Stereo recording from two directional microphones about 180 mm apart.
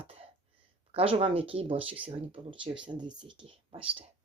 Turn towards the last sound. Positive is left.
turn(degrees=-30)  # may be behind; listen again after turning